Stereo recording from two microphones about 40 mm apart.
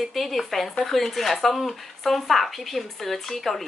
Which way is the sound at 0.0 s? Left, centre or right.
Centre.